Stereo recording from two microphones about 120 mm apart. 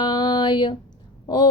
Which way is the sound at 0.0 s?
35° left (ahead or behind).